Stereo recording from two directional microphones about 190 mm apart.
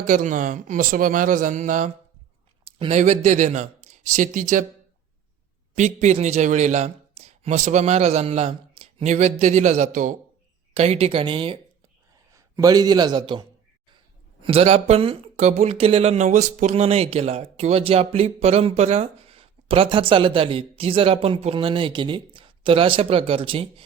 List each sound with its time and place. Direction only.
0.1 s speech: 40° right (ahead or behind)
2.6 s speech: 30° right (ahead or behind)
5.7 s a man's voice: 35° right (ahead or behind)
14.4 s speech: 30° right (ahead or behind)